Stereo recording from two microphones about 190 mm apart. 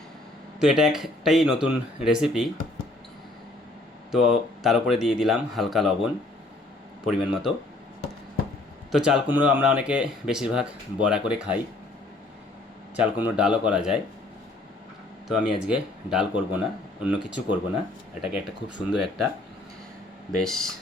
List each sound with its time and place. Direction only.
0.6 s speech: centre (ahead or behind)
4.1 s speech: centre (ahead or behind)
8.9 s speech: 5° right (ahead or behind)
13.0 s speech: 5° right (ahead or behind)
15.3 s speech: 5° right (ahead or behind)
20.4 s speech: centre (ahead or behind)